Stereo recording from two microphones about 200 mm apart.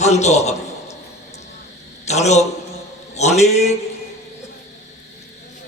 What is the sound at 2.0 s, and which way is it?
A man's voice, 35° left (ahead or behind).